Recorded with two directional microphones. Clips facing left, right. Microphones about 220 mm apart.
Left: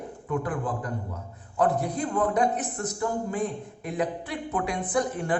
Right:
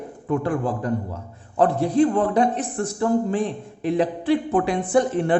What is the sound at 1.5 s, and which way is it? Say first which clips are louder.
Speech: right 7 dB; 30° right (ahead or behind).